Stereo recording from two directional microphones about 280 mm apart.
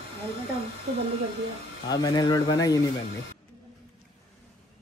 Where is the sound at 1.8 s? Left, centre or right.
Centre.